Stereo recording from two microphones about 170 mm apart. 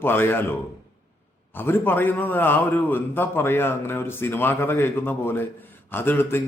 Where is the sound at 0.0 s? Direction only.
15° left (ahead or behind).